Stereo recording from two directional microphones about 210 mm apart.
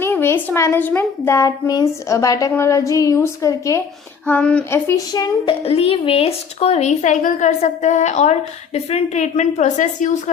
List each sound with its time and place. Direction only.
0.0 s a child's voice: 10° left (ahead or behind); by 10.2 s 35° left (ahead or behind)